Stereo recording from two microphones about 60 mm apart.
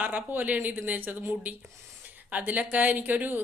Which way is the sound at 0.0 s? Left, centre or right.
Right.